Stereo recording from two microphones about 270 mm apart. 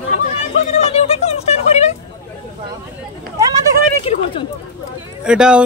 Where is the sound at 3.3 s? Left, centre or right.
Centre.